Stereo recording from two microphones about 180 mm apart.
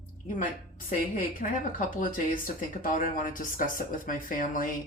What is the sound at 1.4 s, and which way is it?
Speech, 50° left (ahead or behind).